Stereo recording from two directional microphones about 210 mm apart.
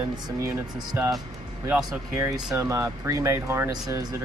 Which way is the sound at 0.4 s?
10° right (ahead or behind).